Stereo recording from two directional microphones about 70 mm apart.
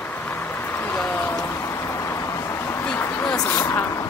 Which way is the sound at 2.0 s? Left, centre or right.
Left.